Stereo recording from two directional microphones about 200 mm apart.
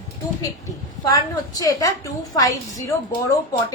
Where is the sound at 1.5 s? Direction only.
20° left (ahead or behind).